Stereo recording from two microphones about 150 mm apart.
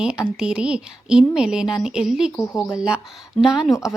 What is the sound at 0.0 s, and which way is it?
A woman's voice, 5° right (ahead or behind).